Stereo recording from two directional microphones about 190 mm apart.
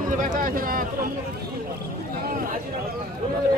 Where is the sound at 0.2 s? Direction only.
45° right (ahead or behind).